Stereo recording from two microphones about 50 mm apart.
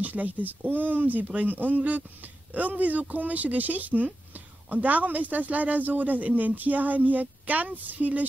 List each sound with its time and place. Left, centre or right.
0.0 s speech: right